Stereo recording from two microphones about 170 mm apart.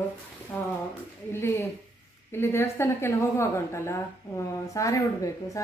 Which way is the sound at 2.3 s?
15° left (ahead or behind).